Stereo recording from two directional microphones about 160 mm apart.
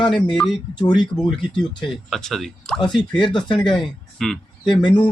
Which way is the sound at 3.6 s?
5° left (ahead or behind).